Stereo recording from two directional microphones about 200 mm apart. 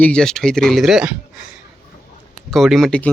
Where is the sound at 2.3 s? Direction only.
Centre (ahead or behind).